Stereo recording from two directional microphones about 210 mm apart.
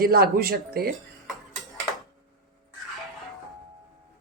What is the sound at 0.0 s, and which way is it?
Speech, 45° right (ahead or behind).